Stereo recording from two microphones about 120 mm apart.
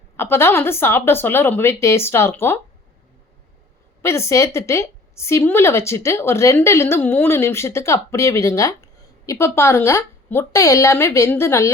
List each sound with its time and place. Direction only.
0.2 s a woman's voice: 20° left (ahead or behind)
4.0 s a woman's voice: 25° left (ahead or behind)